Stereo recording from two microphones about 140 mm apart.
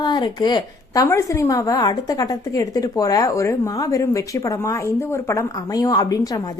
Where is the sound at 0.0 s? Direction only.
30° left (ahead or behind).